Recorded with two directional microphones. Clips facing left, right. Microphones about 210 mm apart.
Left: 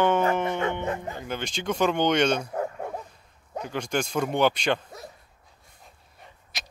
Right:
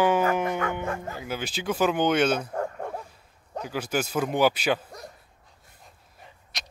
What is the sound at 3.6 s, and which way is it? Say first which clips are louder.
Mantra: even; 5° right (ahead or behind).